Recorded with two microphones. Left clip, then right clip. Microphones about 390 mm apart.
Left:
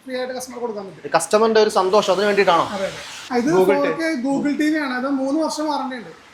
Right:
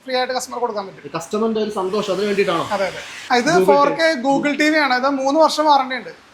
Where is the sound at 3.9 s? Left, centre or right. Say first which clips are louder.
Right 6 dB; right.